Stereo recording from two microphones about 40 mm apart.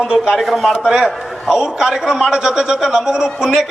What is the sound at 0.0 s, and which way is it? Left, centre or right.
Speech, centre.